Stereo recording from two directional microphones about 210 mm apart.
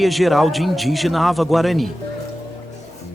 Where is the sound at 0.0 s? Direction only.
Centre (ahead or behind).